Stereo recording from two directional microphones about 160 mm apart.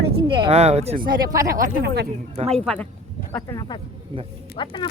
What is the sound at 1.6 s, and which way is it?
Speech, 90° right.